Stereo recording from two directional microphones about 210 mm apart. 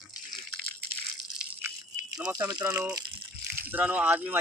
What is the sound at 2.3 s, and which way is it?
Speech, 15° right (ahead or behind).